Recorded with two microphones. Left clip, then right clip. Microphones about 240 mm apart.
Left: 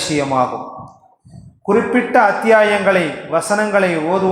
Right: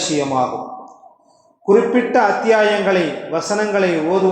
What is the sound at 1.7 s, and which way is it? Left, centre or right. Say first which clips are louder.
A man's voice: right 1 dB; left.